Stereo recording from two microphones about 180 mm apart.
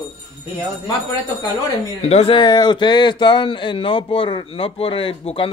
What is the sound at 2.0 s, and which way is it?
Speech, 35° left (ahead or behind).